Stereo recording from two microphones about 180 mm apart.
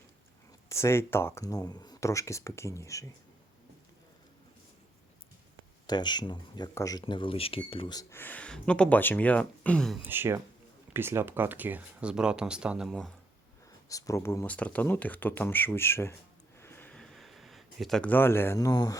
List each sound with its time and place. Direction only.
0.7 s speech: 15° left (ahead or behind)
5.8 s speech: 25° left (ahead or behind)
8.2 s speech: 10° left (ahead or behind)
10.0 s speech: 10° right (ahead or behind)
13.8 s speech: 20° left (ahead or behind)
16.6 s a sound: 10° left (ahead or behind)